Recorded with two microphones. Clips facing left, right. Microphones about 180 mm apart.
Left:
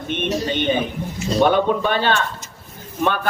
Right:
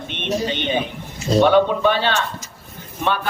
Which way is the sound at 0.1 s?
45° left (ahead or behind).